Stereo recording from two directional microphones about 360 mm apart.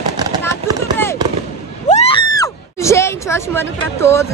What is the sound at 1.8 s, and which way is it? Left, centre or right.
Speech, centre.